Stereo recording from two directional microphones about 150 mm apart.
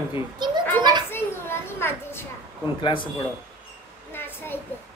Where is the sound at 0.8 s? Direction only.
30° right (ahead or behind).